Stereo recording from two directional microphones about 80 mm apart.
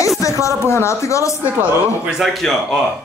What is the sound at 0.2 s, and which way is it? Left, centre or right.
Speech, left.